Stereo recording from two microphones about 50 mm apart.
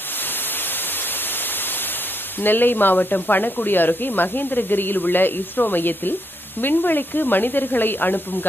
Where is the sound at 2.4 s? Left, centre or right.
Left.